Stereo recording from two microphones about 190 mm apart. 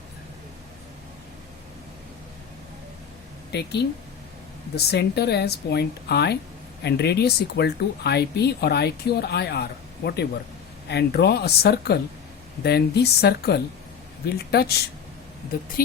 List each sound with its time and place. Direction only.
3.5 s speech: 60° left (ahead or behind)